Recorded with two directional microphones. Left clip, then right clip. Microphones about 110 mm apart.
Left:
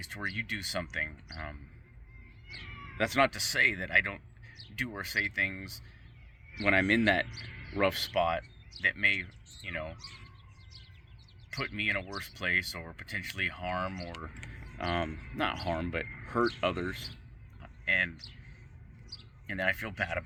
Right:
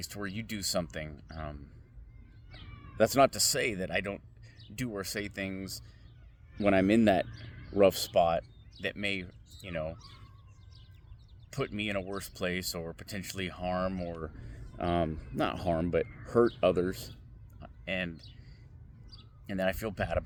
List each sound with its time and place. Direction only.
0.0 s speech: 50° right (ahead or behind)
3.0 s speech: 50° right (ahead or behind)
11.5 s speech: 45° right (ahead or behind)
17.6 s a sound: 45° right (ahead or behind)
19.1 s speech: 45° right (ahead or behind)